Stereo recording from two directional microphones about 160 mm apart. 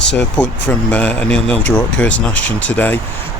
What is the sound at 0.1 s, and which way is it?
Speech, 10° left (ahead or behind).